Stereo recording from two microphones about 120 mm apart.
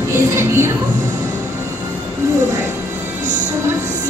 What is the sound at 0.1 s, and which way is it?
Music, 20° right (ahead or behind).